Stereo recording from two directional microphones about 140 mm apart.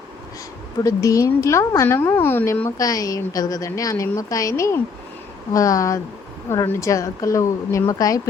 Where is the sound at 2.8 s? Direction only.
25° left (ahead or behind).